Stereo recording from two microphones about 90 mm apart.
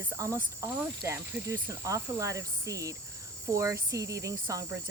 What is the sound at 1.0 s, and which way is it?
Speech, 30° right (ahead or behind).